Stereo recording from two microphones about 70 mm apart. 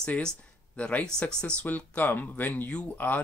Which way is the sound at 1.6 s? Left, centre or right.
Left.